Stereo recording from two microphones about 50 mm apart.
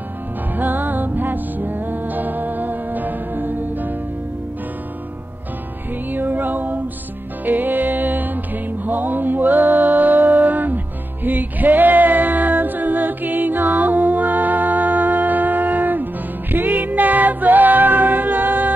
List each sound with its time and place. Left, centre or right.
0.6 s music: right
6.1 s music: right